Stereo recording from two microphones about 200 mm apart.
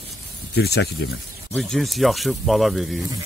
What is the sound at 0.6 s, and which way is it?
Speech, 55° left (ahead or behind).